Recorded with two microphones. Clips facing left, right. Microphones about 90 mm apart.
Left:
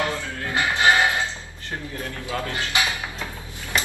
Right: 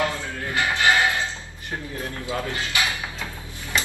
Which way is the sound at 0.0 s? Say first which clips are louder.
Even; 20° left (ahead or behind).